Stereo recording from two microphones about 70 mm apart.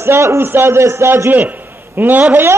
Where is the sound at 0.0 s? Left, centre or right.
Right.